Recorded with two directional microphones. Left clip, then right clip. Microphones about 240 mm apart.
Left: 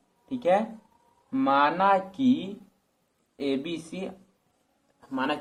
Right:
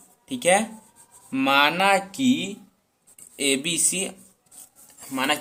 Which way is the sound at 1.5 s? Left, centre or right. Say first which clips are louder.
Right 3 dB; right.